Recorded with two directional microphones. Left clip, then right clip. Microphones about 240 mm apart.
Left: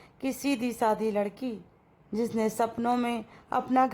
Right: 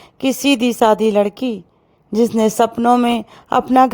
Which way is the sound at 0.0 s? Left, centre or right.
Right.